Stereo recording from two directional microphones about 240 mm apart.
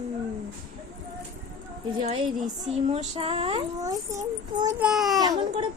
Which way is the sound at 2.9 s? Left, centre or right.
Right.